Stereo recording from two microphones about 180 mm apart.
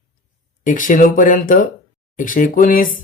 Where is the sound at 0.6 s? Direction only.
45° left (ahead or behind).